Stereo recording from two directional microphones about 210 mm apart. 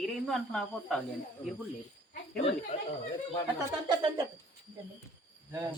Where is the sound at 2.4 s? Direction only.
25° left (ahead or behind).